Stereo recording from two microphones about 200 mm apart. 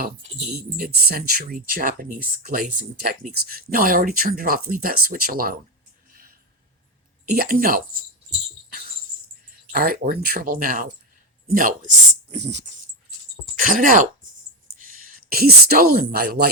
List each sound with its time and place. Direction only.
0.5 s speech: 50° right (ahead or behind)
7.3 s speech: 45° right (ahead or behind)
9.7 s speech: 50° right (ahead or behind)
15.2 s speech: 50° right (ahead or behind)